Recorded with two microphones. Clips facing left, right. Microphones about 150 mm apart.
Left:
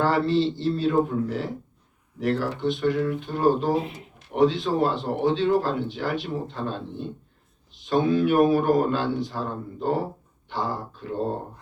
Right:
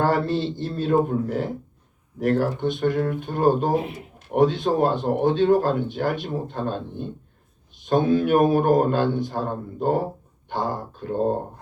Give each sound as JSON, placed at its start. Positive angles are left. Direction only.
{"t": 0.0, "sound": "speech", "side_deg": -50}